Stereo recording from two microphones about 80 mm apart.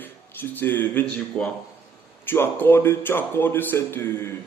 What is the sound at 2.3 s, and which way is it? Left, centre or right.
A man's voice, left.